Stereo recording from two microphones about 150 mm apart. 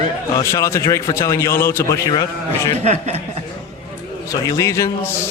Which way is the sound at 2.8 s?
50° right (ahead or behind).